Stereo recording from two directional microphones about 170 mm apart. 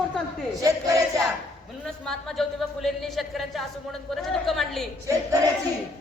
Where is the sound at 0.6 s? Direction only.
20° right (ahead or behind).